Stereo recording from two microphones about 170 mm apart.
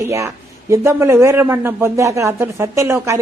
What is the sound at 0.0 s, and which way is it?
Speech, 15° right (ahead or behind).